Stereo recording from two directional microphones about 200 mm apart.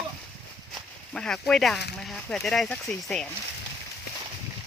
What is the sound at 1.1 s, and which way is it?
Speech, 5° left (ahead or behind).